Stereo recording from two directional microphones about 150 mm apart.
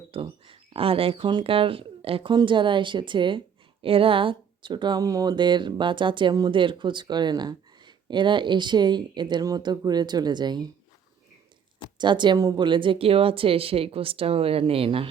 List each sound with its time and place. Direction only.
0.1 s speech: 35° right (ahead or behind)
11.9 s speech: 30° right (ahead or behind)